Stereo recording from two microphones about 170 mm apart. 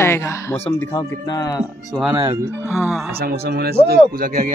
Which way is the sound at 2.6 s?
5° right (ahead or behind).